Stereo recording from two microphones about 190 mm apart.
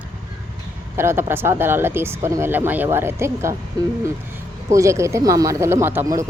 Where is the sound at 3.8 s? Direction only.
20° right (ahead or behind).